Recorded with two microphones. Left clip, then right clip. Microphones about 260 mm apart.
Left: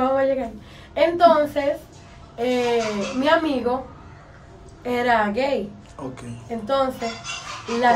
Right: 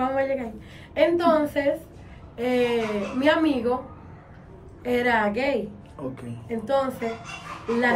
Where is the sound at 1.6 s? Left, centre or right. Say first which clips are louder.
Left 1 dB; centre.